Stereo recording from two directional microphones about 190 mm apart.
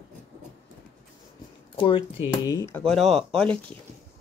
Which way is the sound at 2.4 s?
15° left (ahead or behind).